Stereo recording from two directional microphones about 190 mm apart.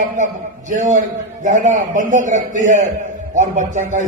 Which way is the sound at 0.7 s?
40° right (ahead or behind).